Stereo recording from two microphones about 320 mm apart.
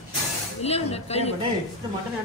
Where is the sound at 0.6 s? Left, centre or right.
Centre.